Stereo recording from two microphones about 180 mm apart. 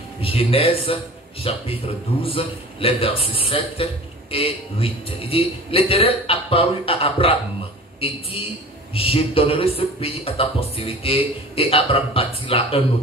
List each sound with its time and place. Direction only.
0.2 s a man's voice: 30° left (ahead or behind)